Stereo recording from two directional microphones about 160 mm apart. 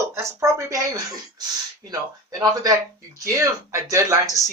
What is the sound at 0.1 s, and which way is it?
Speech, 20° right (ahead or behind).